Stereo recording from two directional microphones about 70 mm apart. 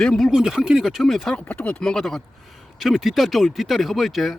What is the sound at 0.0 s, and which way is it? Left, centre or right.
Speech, centre.